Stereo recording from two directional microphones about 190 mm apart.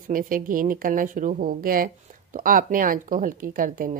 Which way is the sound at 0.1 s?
45° right (ahead or behind).